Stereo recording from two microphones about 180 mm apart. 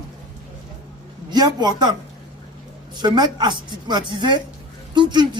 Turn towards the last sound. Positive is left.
turn(degrees=-25)  # may be behind; listen again after turning